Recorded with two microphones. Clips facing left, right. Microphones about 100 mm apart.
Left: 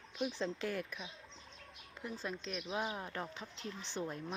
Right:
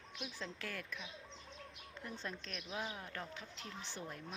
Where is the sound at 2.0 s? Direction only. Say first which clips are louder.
Left 4 dB; 10° left (ahead or behind).